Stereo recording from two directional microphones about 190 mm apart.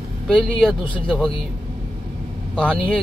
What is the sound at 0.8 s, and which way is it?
Speech, 25° left (ahead or behind).